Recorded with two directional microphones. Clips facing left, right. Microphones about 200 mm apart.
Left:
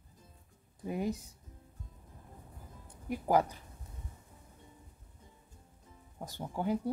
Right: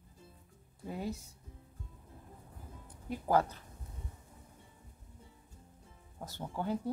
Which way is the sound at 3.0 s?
15° left (ahead or behind).